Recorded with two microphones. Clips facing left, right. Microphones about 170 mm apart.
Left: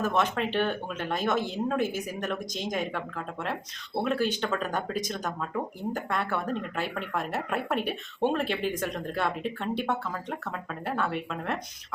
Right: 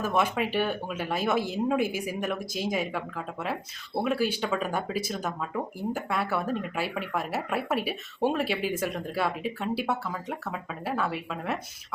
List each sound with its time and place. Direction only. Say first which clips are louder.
0.0 s speech: even; 10° right (ahead or behind)